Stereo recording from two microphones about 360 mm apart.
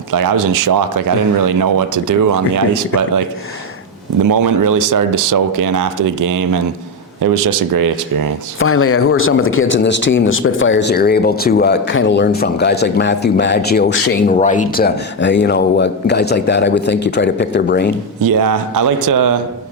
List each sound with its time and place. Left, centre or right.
0.1 s speech: right
4.3 s speech: right
8.5 s speech: left
18.2 s speech: right